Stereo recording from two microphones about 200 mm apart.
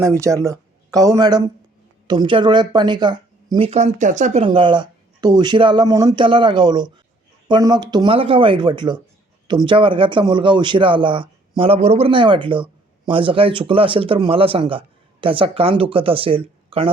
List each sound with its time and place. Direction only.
0.0 s speech: 15° right (ahead or behind); by 4.4 s 35° right (ahead or behind)
4.4 s speech: 25° right (ahead or behind)